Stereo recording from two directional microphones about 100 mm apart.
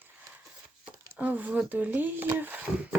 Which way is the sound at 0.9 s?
15° right (ahead or behind).